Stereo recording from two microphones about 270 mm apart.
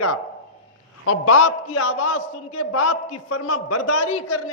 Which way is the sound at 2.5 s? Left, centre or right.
Left.